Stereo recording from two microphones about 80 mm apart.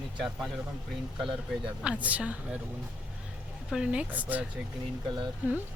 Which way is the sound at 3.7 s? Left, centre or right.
Centre.